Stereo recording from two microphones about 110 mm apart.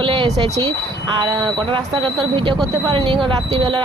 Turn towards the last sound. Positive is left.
turn(degrees=-50)  # may be behind; listen again after turning